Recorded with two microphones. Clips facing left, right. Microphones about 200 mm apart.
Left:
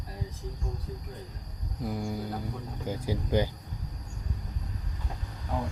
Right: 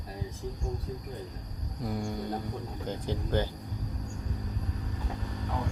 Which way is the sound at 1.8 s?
Centre (ahead or behind).